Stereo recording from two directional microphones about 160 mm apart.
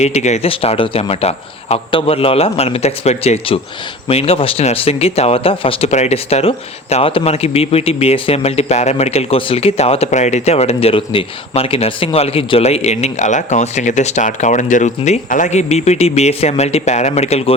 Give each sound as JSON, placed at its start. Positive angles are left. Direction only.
{"t": 0.0, "sound": "a man's voice", "side_deg": 45}